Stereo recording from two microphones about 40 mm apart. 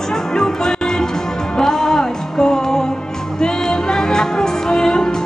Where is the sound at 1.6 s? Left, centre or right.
Centre.